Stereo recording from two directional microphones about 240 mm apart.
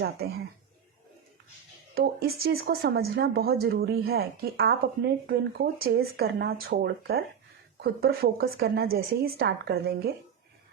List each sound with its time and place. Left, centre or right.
0.0 s speech: right
2.0 s speech: right